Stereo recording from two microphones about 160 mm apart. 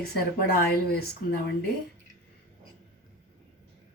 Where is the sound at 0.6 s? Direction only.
75° left (ahead or behind).